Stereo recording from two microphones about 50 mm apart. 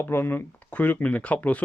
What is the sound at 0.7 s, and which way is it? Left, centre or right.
Speech, left.